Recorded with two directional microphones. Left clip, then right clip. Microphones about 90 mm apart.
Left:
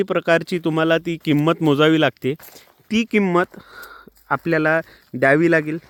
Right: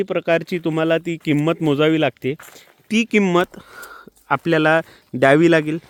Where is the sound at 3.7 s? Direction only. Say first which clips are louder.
Right 2 dB; 20° right (ahead or behind).